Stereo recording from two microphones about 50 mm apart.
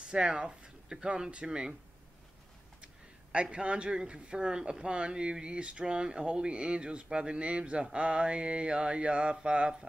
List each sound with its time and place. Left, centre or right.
0.1 s speech: centre
2.8 s a sound: right
3.4 s speech: right